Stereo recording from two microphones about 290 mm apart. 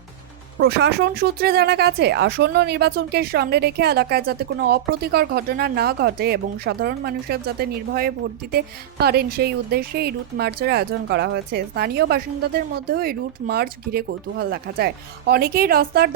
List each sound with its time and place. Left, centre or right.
0.6 s a woman's voice: right